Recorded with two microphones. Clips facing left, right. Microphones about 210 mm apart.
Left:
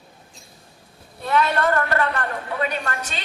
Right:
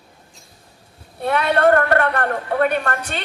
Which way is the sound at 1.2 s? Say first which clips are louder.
Right 3 dB; 60° right (ahead or behind).